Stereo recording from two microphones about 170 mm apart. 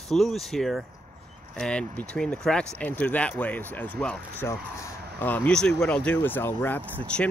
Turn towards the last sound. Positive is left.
turn(degrees=5)  # may be behind; listen again after turning